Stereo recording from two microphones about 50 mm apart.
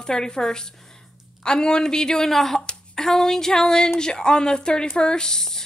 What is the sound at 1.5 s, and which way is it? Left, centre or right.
Speech, centre.